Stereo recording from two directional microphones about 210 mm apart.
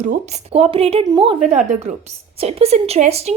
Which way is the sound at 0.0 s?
35° right (ahead or behind).